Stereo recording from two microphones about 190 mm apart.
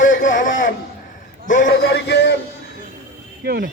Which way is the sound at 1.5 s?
45° left (ahead or behind).